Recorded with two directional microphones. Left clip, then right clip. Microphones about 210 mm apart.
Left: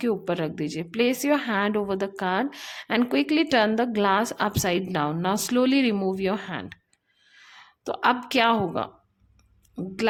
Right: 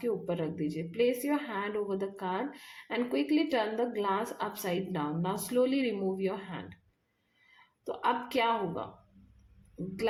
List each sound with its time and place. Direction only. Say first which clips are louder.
0.0 s a woman's voice: left 7 dB; 35° left (ahead or behind)